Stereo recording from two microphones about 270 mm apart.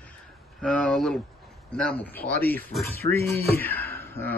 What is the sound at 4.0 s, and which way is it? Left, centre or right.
Fowl, centre.